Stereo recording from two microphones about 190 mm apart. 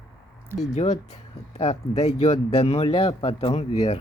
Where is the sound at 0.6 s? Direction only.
40° left (ahead or behind).